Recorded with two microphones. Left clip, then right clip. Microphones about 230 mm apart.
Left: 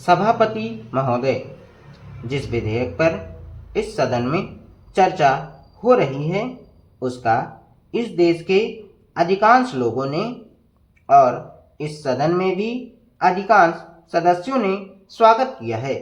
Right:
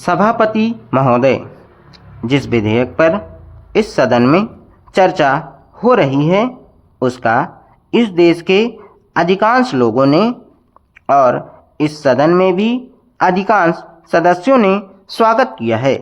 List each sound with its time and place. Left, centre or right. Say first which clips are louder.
0.0 s a woman's voice: right 3 dB; right